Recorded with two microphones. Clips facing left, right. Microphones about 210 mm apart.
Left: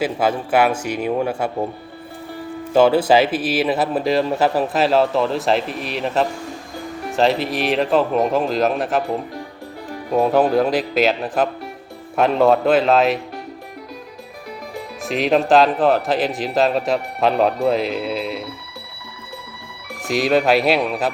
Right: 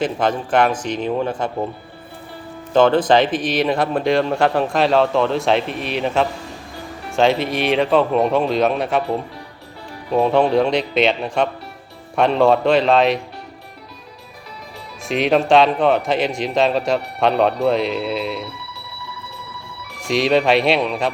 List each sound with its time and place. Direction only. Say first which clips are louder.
0.0 s a man's voice: even; 5° left (ahead or behind)
2.7 s speech: even; 10° left (ahead or behind)
10.1 s speech: even; 5° left (ahead or behind)
15.0 s speech: right 1 dB; centre (ahead or behind)
20.1 s speech: even; centre (ahead or behind)